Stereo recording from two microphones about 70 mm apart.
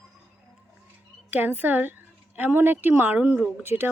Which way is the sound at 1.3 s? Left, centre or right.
Right.